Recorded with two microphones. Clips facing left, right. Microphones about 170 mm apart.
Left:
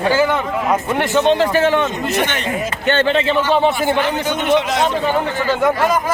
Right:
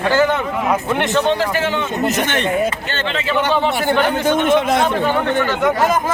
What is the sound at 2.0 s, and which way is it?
Speech, 45° right (ahead or behind).